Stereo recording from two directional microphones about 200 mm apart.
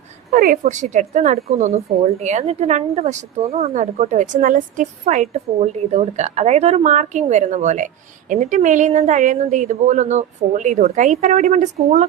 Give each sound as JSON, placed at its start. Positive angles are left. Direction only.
{"t": 0.3, "sound": "a woman's voice", "side_deg": -45}